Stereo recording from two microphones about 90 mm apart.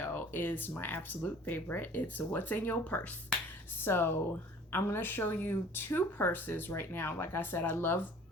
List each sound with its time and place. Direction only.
0.0 s speech: 20° left (ahead or behind)